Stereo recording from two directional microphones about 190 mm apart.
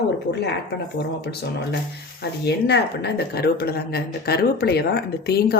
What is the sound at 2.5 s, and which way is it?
Speech, 60° left (ahead or behind).